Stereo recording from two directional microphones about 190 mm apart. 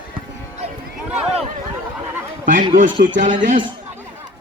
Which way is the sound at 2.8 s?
45° right (ahead or behind).